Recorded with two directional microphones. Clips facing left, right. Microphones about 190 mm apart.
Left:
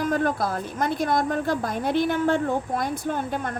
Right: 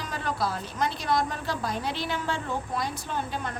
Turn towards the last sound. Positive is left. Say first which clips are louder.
# left 5 dB
turn(degrees=50)  # may be behind; listen again after turning